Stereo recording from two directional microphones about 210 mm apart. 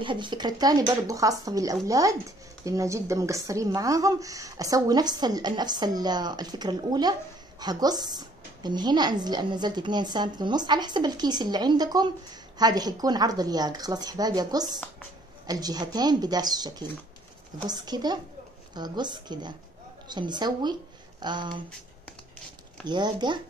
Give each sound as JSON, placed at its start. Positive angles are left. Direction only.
{"t": 0.0, "sound": "speech", "side_deg": -20}
{"t": 22.8, "sound": "speech", "side_deg": -20}